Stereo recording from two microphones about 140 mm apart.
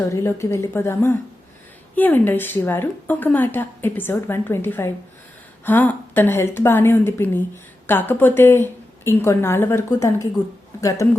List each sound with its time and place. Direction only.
0.1 s a woman's voice: 20° left (ahead or behind)